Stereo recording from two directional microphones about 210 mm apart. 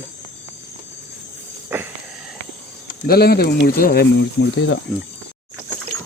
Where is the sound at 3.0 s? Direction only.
45° left (ahead or behind).